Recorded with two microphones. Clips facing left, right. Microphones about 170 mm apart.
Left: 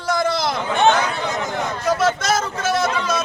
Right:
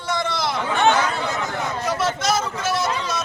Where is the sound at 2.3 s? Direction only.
50° left (ahead or behind).